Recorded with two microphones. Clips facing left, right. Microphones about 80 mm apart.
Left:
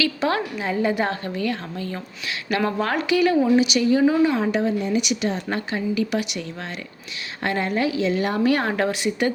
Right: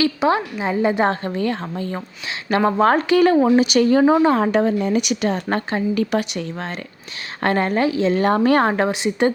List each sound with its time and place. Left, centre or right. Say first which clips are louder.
0.2 s a woman's voice: right 4 dB; centre; by 8.7 s right
8.7 s a woman's voice: right 3 dB; right